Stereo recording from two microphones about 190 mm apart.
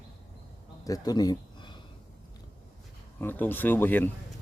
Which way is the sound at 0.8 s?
20° left (ahead or behind).